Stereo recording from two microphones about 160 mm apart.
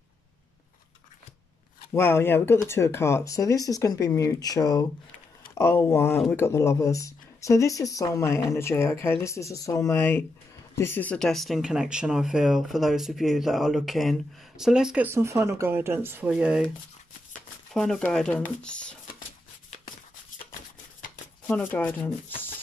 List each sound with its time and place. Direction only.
2.0 s speech: 15° left (ahead or behind); by 15.0 s 5° right (ahead or behind)
15.0 s speech: 15° right (ahead or behind)
17.7 s speech: 5° left (ahead or behind)
21.5 s speech: 10° left (ahead or behind)